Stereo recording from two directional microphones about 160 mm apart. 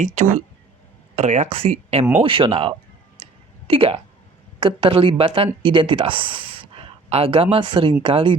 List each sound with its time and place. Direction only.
0.0 s speech: 50° right (ahead or behind); by 8.4 s 30° right (ahead or behind)